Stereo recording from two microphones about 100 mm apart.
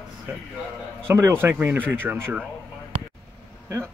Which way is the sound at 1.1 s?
25° right (ahead or behind).